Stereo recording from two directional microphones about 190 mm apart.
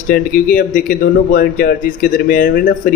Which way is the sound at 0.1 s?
45° left (ahead or behind).